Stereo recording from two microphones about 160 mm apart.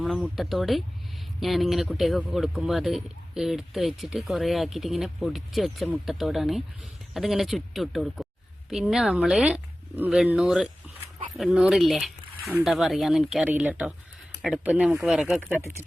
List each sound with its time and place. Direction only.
0.0 s speech: centre (ahead or behind)